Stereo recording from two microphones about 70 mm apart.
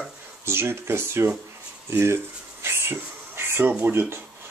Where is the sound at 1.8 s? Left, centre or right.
Right.